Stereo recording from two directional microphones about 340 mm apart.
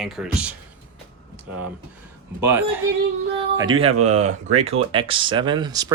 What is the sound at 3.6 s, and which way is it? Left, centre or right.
Speech, centre.